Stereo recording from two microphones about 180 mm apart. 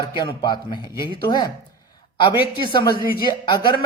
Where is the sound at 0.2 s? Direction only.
25° left (ahead or behind).